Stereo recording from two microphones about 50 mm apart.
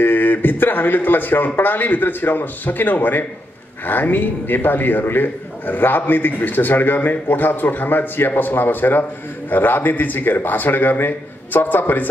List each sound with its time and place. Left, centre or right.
0.0 s a man's voice: left